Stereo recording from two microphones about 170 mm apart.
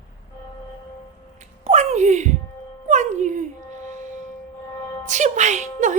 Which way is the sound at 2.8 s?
45° right (ahead or behind).